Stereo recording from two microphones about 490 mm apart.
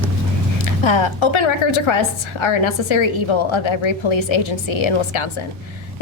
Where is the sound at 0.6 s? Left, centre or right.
Left.